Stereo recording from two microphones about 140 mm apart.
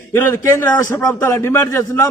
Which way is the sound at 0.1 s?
15° left (ahead or behind).